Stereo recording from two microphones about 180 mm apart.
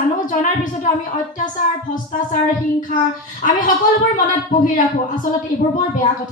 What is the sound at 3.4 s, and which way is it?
A woman's voice, 50° left (ahead or behind).